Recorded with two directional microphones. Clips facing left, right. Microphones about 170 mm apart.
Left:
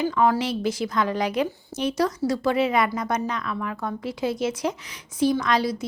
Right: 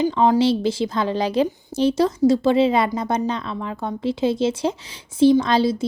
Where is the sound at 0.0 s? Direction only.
20° right (ahead or behind).